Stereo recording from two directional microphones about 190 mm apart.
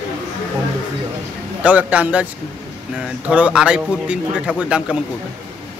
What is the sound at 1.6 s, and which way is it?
Speech, 10° right (ahead or behind).